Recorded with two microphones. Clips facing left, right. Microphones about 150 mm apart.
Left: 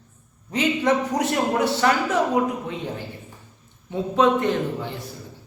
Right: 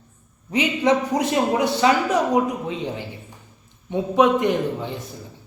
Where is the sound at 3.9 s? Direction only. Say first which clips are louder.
Right 2 dB; 15° right (ahead or behind).